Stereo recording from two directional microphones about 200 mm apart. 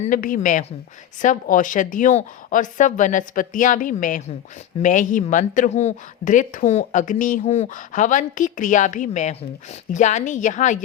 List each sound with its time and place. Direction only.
0.1 s a woman's voice: 45° left (ahead or behind)